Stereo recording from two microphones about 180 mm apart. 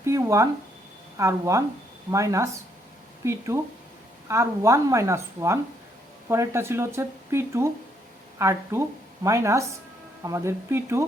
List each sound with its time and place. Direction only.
0.0 s speech: 15° right (ahead or behind)